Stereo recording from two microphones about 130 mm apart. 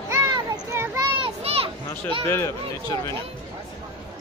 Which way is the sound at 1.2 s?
45° right (ahead or behind).